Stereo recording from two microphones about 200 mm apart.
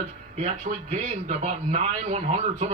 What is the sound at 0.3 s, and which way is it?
A man's voice, 30° right (ahead or behind).